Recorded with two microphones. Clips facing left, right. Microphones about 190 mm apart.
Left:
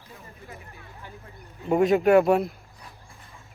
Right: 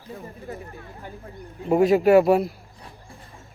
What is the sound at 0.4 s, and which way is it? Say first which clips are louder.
Speech: right 8 dB; 45° right (ahead or behind).